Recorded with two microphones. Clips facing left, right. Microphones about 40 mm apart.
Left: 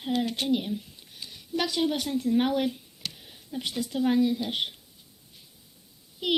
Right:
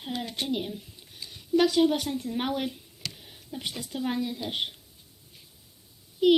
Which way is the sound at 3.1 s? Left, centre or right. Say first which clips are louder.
Left 3 dB; centre.